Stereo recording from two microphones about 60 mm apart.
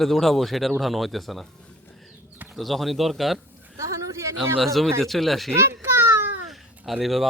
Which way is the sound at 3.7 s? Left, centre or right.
Right.